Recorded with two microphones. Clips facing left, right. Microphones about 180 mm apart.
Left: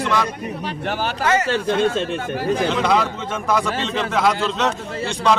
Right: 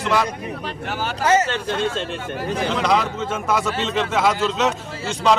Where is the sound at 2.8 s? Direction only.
Centre (ahead or behind).